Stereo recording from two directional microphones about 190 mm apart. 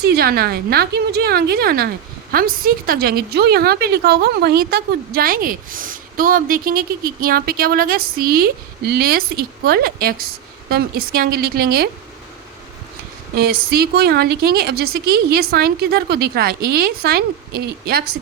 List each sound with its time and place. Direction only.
0.0 s a woman's voice: 55° right (ahead or behind)
13.3 s a woman's voice: 55° right (ahead or behind)